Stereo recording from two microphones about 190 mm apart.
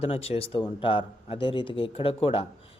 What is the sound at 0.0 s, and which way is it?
Speech, 30° left (ahead or behind).